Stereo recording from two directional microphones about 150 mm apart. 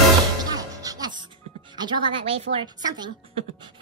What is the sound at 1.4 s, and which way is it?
Music, 40° right (ahead or behind).